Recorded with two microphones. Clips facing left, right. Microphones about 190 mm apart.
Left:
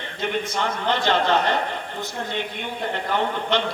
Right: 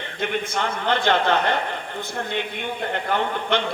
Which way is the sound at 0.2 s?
55° right (ahead or behind).